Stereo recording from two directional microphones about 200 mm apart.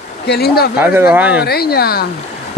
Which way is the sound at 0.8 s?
10° right (ahead or behind).